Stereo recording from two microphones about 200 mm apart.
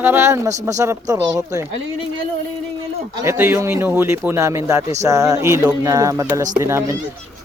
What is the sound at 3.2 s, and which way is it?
Speech, 10° right (ahead or behind).